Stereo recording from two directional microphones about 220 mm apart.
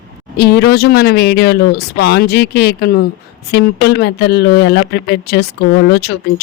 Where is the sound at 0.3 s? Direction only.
45° left (ahead or behind).